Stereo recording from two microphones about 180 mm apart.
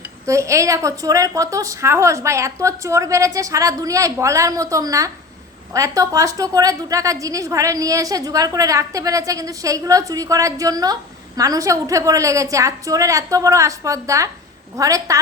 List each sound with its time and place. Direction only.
0.3 s a woman's voice: 15° right (ahead or behind)